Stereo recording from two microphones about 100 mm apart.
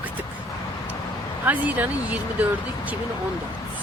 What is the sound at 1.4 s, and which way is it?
Speech, 15° right (ahead or behind).